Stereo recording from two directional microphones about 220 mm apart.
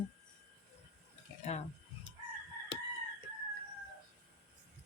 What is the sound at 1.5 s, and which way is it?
Speech, 30° left (ahead or behind).